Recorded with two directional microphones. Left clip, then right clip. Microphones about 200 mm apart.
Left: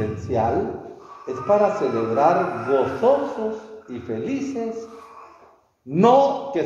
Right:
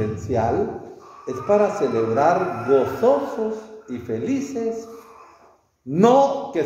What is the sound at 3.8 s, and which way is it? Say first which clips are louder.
A man's voice: right 2 dB; 10° right (ahead or behind).